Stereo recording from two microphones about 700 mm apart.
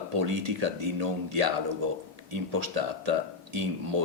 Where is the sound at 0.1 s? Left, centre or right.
Right.